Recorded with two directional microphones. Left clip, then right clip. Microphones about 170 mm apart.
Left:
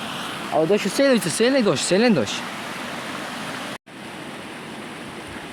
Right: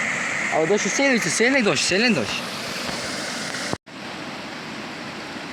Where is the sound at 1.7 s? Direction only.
40° left (ahead or behind).